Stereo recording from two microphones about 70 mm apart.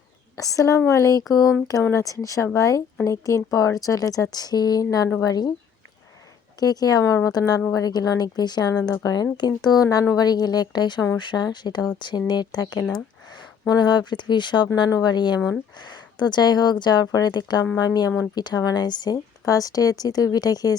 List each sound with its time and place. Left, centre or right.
0.3 s speech: left
1.8 s speech: left
2.0 s speech: left
6.6 s speech: left
7.0 s speech: left
7.3 s speech: left
9.4 s speech: left
10.2 s a woman's voice: left
14.8 s a woman's voice: left
19.5 s speech: left